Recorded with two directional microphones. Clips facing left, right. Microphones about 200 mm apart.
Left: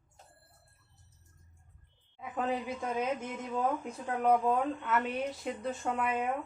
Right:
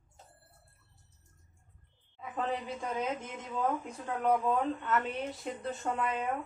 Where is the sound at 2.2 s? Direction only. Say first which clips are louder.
Left 1 dB; 5° left (ahead or behind).